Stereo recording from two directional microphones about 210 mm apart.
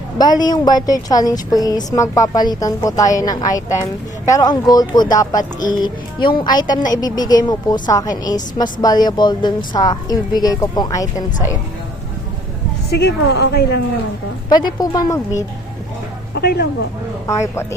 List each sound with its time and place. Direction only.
0.2 s a woman's voice: 20° left (ahead or behind)
12.9 s a woman's voice: 50° left (ahead or behind)
14.5 s a woman's voice: 20° left (ahead or behind)
16.3 s a woman's voice: 50° left (ahead or behind)
17.5 s a woman's voice: 10° left (ahead or behind)